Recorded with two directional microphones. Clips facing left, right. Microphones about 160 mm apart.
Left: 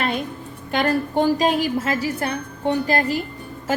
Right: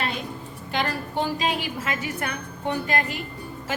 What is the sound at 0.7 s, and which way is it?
A woman's voice, 50° left (ahead or behind).